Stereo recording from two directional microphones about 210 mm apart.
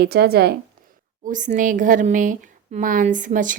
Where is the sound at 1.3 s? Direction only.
40° right (ahead or behind).